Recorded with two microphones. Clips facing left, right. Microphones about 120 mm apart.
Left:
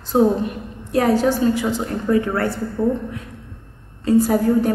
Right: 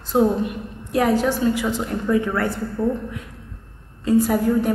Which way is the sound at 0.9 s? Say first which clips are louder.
Left 2 dB; 35° left (ahead or behind).